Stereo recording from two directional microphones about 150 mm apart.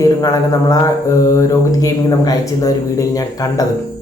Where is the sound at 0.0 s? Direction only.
25° left (ahead or behind).